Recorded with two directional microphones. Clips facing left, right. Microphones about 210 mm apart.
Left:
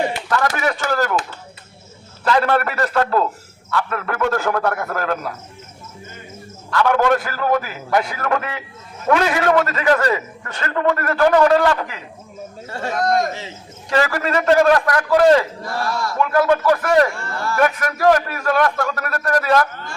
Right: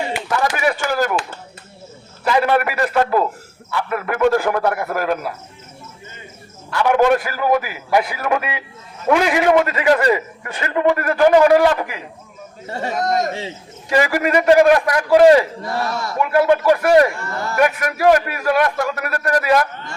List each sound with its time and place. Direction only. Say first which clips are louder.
0.3 s speech: right 4 dB; 10° right (ahead or behind)
2.2 s a man's voice: right 1 dB; 10° right (ahead or behind)
6.7 s a man's voice: right 2 dB; 15° right (ahead or behind)